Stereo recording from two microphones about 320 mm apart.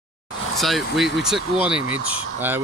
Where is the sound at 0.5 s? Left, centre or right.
Centre.